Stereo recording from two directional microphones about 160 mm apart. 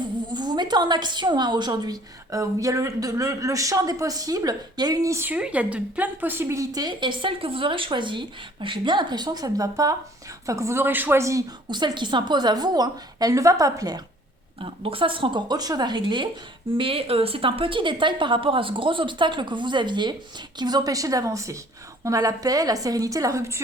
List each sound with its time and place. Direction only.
0.3 s a woman's voice: 25° right (ahead or behind)
14.6 s a woman's voice: 35° right (ahead or behind); by 23.6 s 20° right (ahead or behind)